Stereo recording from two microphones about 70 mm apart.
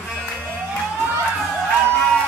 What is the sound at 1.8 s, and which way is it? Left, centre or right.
Music, centre.